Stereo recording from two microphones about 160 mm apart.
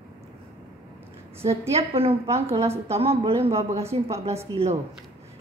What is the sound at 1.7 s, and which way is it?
A woman's voice, 35° right (ahead or behind).